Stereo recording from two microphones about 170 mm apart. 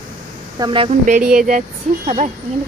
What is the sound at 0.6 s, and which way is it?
Speech, 30° right (ahead or behind).